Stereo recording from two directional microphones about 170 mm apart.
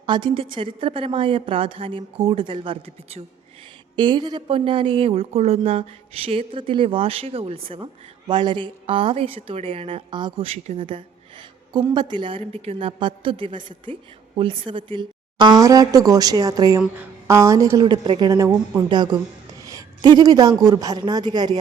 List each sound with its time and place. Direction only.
0.0 s a woman's voice: 30° right (ahead or behind)